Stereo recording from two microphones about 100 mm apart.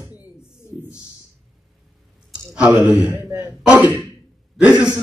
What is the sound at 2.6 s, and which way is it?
Speech, 10° right (ahead or behind).